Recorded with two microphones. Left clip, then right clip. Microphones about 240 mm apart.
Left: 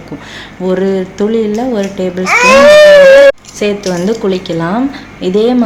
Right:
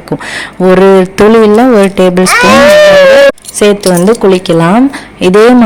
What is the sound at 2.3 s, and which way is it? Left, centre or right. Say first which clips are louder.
Speech: left 1 dB; right.